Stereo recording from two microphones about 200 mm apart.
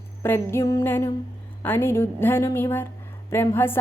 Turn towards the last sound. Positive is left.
turn(degrees=10)  # may be behind; listen again after turning